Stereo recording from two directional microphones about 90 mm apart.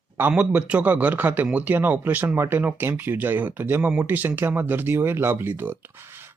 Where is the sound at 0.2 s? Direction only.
15° right (ahead or behind).